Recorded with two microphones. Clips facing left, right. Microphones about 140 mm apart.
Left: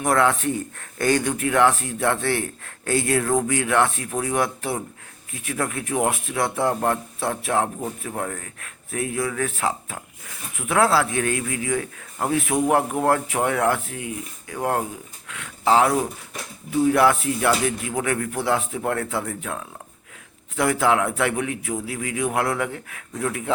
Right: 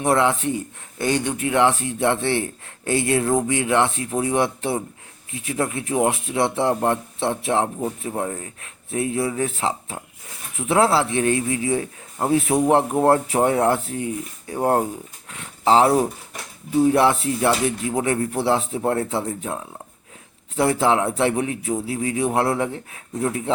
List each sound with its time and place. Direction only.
0.0 s speech: 25° right (ahead or behind)